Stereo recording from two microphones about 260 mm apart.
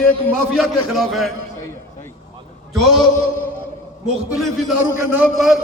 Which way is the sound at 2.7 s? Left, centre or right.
Centre.